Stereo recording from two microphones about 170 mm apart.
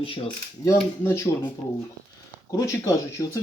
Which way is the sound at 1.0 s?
15° left (ahead or behind).